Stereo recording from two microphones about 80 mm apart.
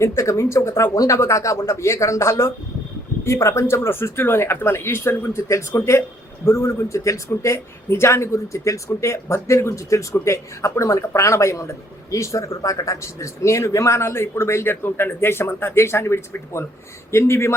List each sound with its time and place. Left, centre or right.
0.0 s speech: left